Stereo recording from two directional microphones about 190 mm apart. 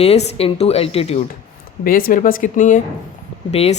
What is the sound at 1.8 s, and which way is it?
A man's voice, 50° left (ahead or behind).